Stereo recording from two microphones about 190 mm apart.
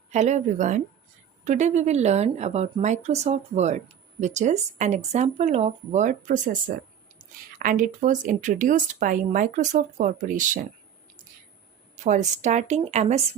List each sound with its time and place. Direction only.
0.1 s speech: 35° right (ahead or behind)
12.0 s speech: 40° right (ahead or behind)